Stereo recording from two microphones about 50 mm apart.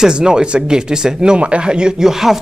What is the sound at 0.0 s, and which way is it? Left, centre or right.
Speech, centre.